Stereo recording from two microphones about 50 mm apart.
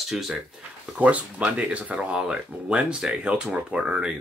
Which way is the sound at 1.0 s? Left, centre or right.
Right.